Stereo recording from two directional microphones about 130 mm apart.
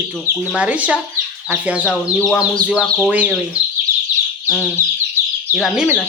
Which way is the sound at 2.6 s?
10° right (ahead or behind).